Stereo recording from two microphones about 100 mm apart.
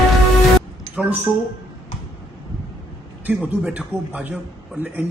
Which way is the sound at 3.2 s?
15° right (ahead or behind).